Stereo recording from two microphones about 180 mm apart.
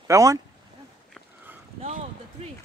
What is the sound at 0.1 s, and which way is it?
Speech, 15° right (ahead or behind).